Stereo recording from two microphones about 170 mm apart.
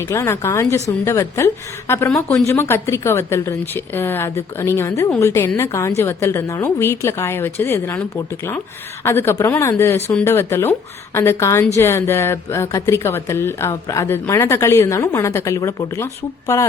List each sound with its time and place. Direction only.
0.0 s speech: 15° left (ahead or behind)